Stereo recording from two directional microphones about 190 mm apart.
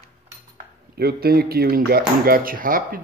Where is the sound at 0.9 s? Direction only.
55° right (ahead or behind).